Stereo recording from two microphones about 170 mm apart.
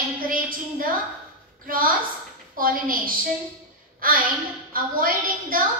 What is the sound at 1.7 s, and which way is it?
A woman's voice, 55° right (ahead or behind).